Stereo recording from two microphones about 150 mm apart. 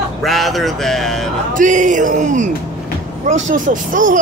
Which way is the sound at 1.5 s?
60° right (ahead or behind).